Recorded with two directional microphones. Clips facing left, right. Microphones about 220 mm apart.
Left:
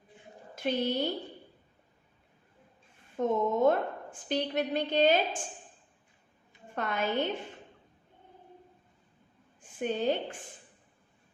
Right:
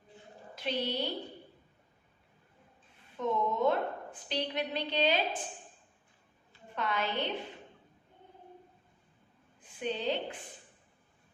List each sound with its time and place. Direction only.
0.5 s a woman's voice: 45° left (ahead or behind)
3.2 s a woman's voice: 50° left (ahead or behind)
6.7 s a woman's voice: 50° left (ahead or behind)
9.6 s a woman's voice: 45° left (ahead or behind)